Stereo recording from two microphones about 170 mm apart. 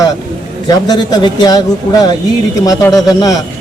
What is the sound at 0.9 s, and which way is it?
Speech, 25° left (ahead or behind).